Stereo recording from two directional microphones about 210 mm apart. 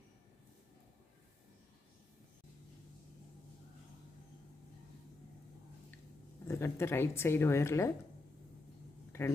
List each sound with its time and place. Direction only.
6.5 s a woman's voice: 10° left (ahead or behind)
9.1 s speech: 10° left (ahead or behind)